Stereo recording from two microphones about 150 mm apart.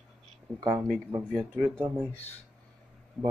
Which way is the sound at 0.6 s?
20° right (ahead or behind).